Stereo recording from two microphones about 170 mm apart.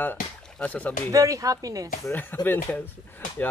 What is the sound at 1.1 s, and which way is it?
Speech, 20° right (ahead or behind).